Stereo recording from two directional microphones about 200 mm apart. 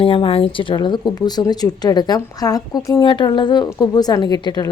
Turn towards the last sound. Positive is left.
turn(degrees=20)  # may be behind; listen again after turning